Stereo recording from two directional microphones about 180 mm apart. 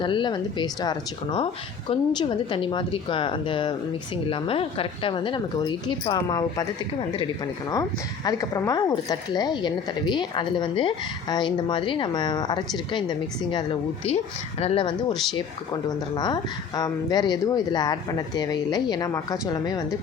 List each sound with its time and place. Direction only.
0.0 s speech: 25° left (ahead or behind)
7.7 s speech: 20° left (ahead or behind)
15.1 s speech: centre (ahead or behind)
15.4 s speech: 25° left (ahead or behind)